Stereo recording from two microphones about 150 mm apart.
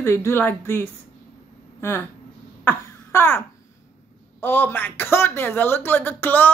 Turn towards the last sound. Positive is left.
turn(degrees=10)  # may be behind; listen again after turning